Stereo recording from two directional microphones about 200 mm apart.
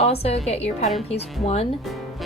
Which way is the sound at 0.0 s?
30° left (ahead or behind).